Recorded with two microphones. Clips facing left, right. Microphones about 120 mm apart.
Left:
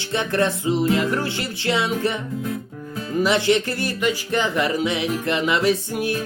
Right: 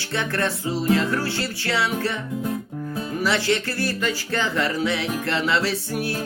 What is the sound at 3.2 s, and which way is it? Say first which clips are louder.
Speech: left 5 dB; 20° left (ahead or behind).